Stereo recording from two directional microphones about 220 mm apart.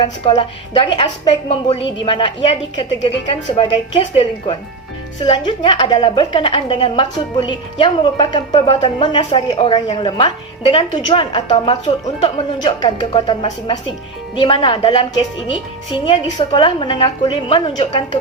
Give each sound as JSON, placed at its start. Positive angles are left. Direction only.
{"t": 0.0, "sound": "a woman's voice", "side_deg": 20}
{"t": 16.0, "sound": "a woman's voice", "side_deg": 25}